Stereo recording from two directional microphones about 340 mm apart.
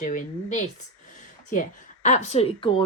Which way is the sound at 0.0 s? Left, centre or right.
Left.